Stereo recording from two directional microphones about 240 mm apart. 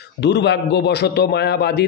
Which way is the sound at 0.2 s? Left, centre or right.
Left.